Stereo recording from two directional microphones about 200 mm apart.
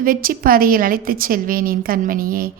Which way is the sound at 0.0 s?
45° right (ahead or behind).